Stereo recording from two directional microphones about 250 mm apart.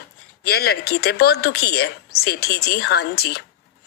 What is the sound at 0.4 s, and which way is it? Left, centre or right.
A woman's voice, left.